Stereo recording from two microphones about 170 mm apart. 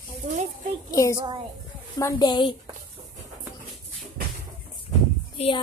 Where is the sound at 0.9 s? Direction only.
20° left (ahead or behind).